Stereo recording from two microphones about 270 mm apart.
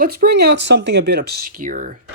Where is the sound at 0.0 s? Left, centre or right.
Right.